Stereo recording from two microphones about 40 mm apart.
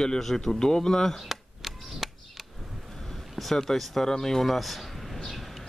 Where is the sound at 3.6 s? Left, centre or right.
Centre.